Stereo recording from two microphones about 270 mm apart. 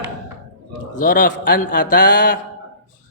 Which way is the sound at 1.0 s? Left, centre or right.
Left.